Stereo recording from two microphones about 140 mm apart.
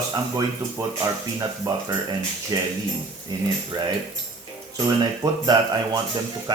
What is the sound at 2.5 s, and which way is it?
Speech, 30° right (ahead or behind).